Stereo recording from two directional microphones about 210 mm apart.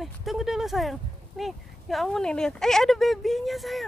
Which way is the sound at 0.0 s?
Centre (ahead or behind).